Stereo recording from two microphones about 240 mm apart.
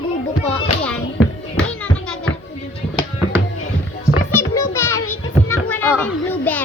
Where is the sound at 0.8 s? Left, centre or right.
Centre.